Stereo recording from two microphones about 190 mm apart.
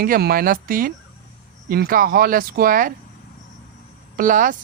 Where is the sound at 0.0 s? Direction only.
50° right (ahead or behind).